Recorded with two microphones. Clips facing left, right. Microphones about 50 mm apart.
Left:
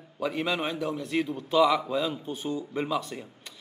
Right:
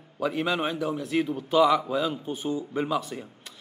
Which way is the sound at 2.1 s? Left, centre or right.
Centre.